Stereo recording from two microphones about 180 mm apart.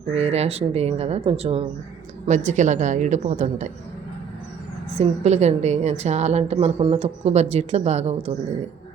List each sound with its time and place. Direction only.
0.1 s a woman's voice: 35° right (ahead or behind)
4.9 s a woman's voice: 35° right (ahead or behind)